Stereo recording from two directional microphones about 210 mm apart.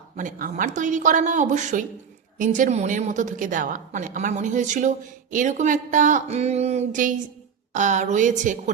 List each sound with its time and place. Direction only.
0.2 s a woman's voice: 40° right (ahead or behind)